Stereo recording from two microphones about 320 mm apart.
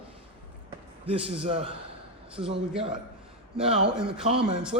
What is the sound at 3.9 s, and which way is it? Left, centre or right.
Speech, centre.